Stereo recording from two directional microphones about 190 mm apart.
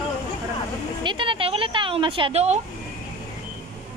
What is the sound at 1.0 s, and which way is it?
Speech, 25° right (ahead or behind).